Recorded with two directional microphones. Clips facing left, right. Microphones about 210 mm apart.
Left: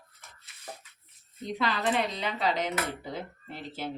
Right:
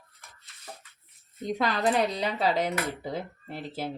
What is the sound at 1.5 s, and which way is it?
Speech, 45° right (ahead or behind).